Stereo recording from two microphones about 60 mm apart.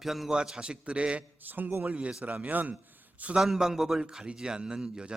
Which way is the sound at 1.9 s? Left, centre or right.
Right.